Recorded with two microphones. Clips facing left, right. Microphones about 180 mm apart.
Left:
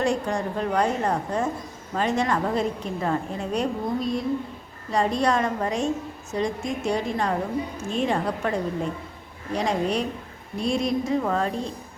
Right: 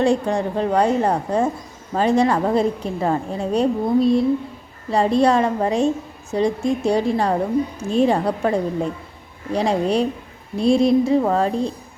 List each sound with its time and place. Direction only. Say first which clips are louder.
0.0 s a woman's voice: right 6 dB; 30° right (ahead or behind)